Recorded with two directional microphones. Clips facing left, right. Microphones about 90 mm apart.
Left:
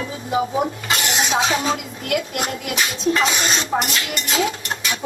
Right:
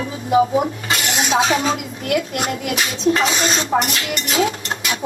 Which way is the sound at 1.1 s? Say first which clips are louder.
Right 4 dB; 35° right (ahead or behind).